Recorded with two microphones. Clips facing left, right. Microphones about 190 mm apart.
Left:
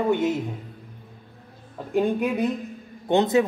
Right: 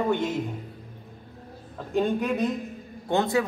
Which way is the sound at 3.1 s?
20° left (ahead or behind).